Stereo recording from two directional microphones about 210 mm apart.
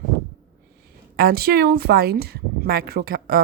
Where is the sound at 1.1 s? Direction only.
45° right (ahead or behind).